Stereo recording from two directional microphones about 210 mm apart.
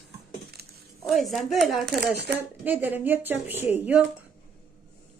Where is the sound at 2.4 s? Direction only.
10° right (ahead or behind).